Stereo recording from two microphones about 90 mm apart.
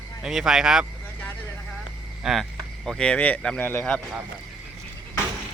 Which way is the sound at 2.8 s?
10° left (ahead or behind).